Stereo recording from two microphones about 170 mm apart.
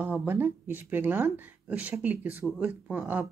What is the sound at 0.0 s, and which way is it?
Speech, 10° right (ahead or behind).